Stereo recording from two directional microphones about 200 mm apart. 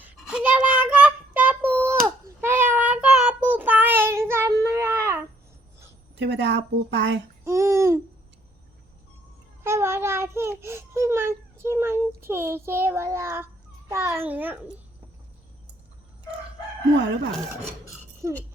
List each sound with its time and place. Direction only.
0.0 s child singing: 5° right (ahead or behind)
6.1 s a woman's voice: 60° right (ahead or behind)
7.4 s babbling: 15° right (ahead or behind)
9.6 s baby cry: 15° right (ahead or behind)
13.9 s a child's voice: 15° right (ahead or behind)